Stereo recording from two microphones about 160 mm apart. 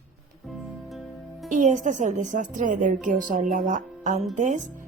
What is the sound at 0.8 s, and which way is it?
Music, centre (ahead or behind).